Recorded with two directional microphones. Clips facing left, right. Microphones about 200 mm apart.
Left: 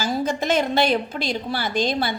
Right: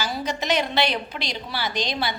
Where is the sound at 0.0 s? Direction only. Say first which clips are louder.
Left 5 dB; 50° left (ahead or behind).